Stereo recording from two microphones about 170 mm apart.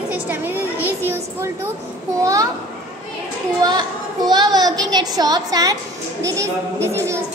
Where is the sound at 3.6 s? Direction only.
25° right (ahead or behind).